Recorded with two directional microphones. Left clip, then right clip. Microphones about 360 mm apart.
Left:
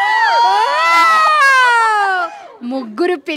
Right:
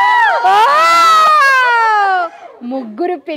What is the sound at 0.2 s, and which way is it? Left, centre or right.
Crowd, centre.